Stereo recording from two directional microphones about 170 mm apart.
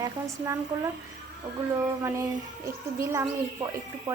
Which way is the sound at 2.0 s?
20° right (ahead or behind).